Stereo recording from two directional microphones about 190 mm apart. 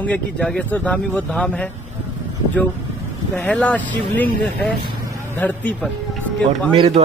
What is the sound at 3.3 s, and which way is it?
Speech, 10° left (ahead or behind).